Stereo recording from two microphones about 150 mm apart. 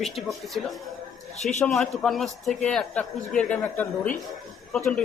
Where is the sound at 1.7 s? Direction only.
Centre (ahead or behind).